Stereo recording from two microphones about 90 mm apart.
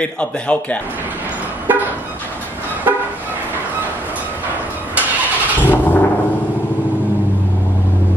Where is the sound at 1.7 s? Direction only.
20° right (ahead or behind).